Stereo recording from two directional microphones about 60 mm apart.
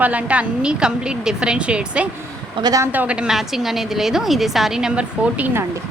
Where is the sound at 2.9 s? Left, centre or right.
Right.